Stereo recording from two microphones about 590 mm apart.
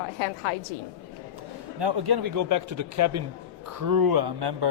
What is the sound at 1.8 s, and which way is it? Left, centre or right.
Speech, right.